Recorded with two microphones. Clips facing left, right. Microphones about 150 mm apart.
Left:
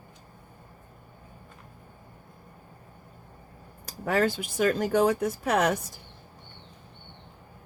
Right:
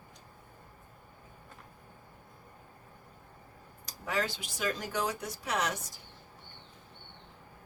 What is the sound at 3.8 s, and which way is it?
Speech, 50° left (ahead or behind).